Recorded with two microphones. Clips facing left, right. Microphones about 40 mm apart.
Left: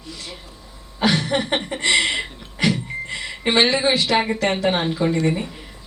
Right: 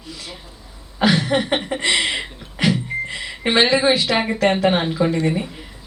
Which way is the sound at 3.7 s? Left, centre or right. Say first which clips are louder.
Right 2 dB; centre.